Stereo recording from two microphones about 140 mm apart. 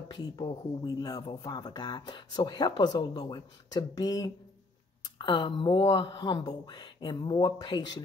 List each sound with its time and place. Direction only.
0.1 s speech: 35° left (ahead or behind)